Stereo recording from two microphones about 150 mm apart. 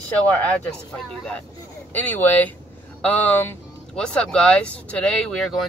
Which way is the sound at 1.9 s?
10° left (ahead or behind).